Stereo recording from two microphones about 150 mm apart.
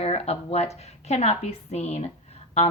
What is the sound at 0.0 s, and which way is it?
A woman's voice, 45° left (ahead or behind).